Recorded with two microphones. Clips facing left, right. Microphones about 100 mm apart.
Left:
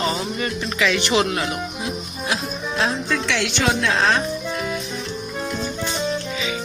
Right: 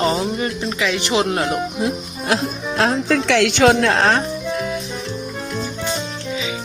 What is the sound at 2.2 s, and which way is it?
A woman's voice, 60° right (ahead or behind).